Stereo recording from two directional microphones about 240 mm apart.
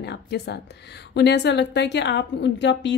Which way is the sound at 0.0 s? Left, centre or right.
Left.